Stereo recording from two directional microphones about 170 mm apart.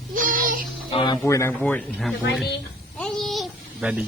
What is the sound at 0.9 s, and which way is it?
Speech, 30° left (ahead or behind).